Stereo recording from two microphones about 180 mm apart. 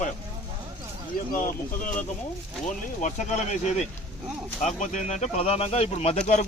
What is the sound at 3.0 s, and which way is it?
Speech, 40° left (ahead or behind).